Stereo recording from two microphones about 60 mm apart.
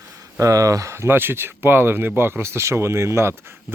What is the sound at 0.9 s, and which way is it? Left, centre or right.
Speech, right.